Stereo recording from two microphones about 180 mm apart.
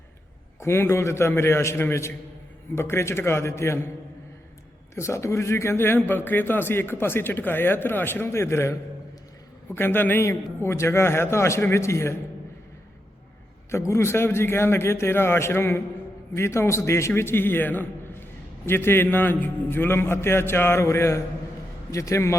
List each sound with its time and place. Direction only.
0.6 s a man's voice: 15° left (ahead or behind)
4.9 s a man's voice: 15° left (ahead or behind)
13.7 s a man's voice: 15° left (ahead or behind)